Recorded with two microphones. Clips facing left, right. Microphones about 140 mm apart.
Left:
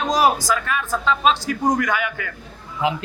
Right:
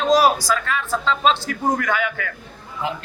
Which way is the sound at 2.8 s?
90° left.